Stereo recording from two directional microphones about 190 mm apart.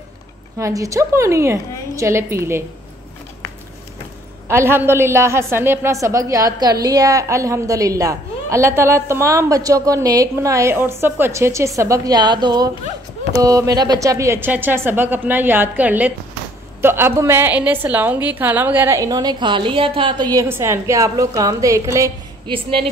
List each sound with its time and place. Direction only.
0.6 s a woman's voice: 15° right (ahead or behind)
4.5 s a woman's voice: 10° right (ahead or behind)
22.5 s a woman's voice: 30° right (ahead or behind)